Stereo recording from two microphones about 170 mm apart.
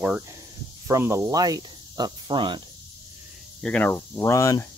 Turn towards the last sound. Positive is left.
turn(degrees=20)  # may be behind; listen again after turning